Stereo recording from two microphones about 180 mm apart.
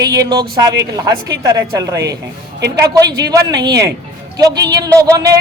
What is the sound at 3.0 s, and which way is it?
Speech, 70° right (ahead or behind).